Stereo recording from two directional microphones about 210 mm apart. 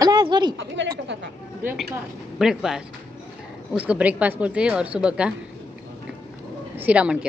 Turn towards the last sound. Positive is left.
turn(degrees=-5)  # may be behind; listen again after turning